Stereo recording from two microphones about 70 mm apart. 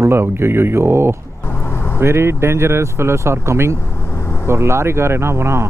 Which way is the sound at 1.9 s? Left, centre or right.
Right.